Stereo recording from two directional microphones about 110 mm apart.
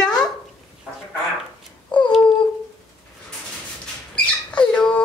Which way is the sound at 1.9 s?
45° left (ahead or behind).